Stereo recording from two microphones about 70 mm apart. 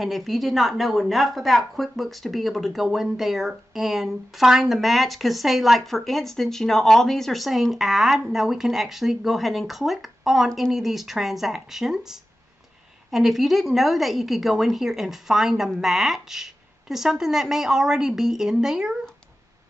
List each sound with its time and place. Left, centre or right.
0.0 s a woman's voice: centre